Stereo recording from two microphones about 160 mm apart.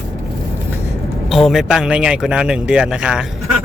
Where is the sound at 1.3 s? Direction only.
Centre (ahead or behind).